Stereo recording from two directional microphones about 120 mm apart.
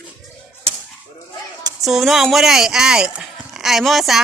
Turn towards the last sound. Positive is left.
turn(degrees=0)  # may be behind; listen again after turning